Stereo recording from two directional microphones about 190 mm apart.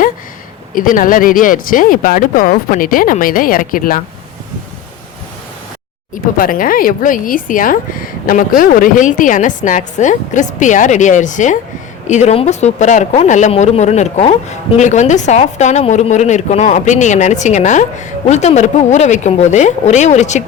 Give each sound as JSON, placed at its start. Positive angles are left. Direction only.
{"t": 0.7, "sound": "speech", "side_deg": 45}
{"t": 6.3, "sound": "a woman's voice", "side_deg": 45}